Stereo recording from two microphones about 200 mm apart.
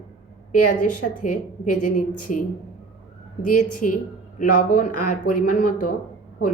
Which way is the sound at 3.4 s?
40° left (ahead or behind).